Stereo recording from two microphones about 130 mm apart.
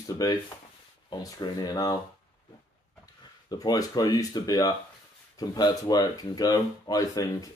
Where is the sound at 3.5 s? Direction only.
30° left (ahead or behind).